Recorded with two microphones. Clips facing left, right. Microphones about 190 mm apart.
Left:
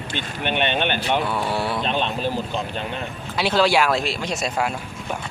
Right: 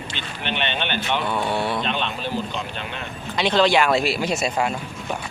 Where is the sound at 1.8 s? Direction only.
40° left (ahead or behind).